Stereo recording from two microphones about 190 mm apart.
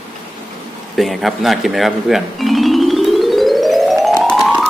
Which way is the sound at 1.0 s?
Centre (ahead or behind).